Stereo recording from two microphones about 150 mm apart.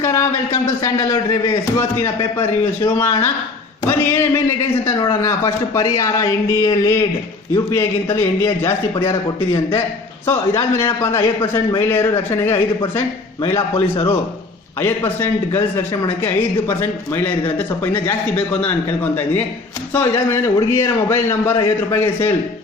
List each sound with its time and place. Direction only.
0.0 s speech: 20° left (ahead or behind)
2.8 s a man's voice: 20° left (ahead or behind)
10.2 s a man's voice: 20° left (ahead or behind)
13.7 s a man's voice: 40° left (ahead or behind)
14.8 s a man's voice: 15° left (ahead or behind)
19.9 s a man's voice: 15° left (ahead or behind)